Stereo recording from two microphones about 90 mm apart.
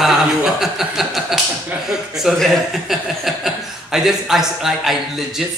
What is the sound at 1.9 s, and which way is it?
A man's voice, 5° right (ahead or behind).